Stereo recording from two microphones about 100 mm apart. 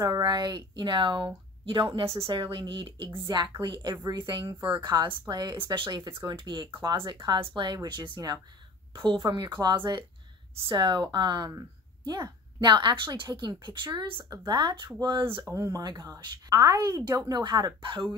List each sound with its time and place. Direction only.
0.0 s a woman's voice: 40° right (ahead or behind)
10.5 s speech: 65° right (ahead or behind)
10.8 s a woman's voice: 45° right (ahead or behind)
15.5 s a woman's voice: 35° right (ahead or behind)